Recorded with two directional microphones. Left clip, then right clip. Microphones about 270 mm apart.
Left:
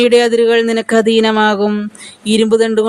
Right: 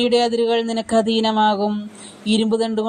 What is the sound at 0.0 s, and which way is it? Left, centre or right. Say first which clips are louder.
Mantra: left 8 dB; left.